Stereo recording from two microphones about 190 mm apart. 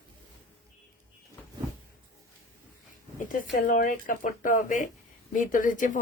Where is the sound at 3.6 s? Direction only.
45° left (ahead or behind).